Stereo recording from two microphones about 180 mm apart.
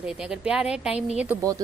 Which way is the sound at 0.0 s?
5° right (ahead or behind).